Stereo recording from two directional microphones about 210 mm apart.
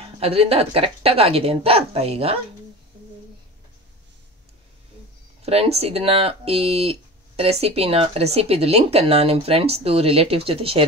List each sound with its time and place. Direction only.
0.2 s speech: 30° right (ahead or behind)
5.4 s speech: 30° right (ahead or behind)